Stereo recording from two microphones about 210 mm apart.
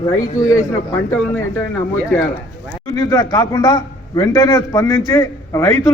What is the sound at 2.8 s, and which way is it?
A man's voice, 15° left (ahead or behind).